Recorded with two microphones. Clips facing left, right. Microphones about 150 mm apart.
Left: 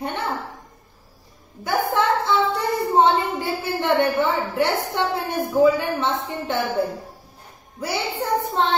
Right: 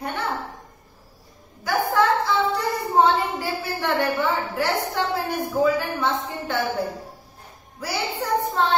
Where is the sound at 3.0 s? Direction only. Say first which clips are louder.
Even; 25° left (ahead or behind).